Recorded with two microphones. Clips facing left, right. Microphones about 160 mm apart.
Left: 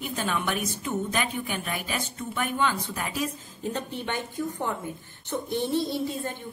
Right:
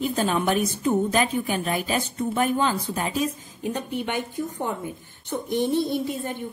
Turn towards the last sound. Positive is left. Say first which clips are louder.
# right 3 dB
turn(degrees=-15)  # may be behind; listen again after turning